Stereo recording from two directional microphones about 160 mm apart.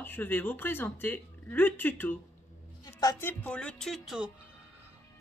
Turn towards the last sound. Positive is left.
turn(degrees=-5)  # may be behind; listen again after turning